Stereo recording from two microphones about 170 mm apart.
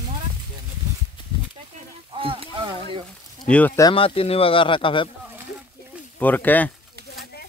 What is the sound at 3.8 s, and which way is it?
Speech, 30° left (ahead or behind).